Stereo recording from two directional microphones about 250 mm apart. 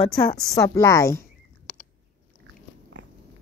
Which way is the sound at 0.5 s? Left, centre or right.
Centre.